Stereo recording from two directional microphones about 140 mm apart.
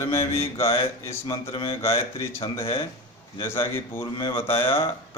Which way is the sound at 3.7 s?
15° left (ahead or behind).